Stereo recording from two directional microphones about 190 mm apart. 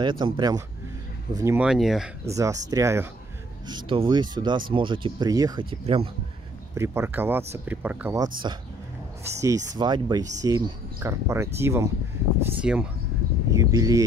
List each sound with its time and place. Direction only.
0.0 s speech: 25° right (ahead or behind)
1.7 s speech: centre (ahead or behind)
2.2 s speech: 15° right (ahead or behind)
3.6 s speech: 25° right (ahead or behind)
6.7 s speech: 15° right (ahead or behind)
8.4 s speech: 25° right (ahead or behind); by 12.8 s 5° right (ahead or behind)
13.5 s speech: 15° right (ahead or behind)